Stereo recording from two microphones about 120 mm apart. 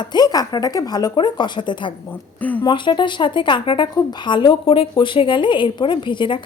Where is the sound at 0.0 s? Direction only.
35° left (ahead or behind).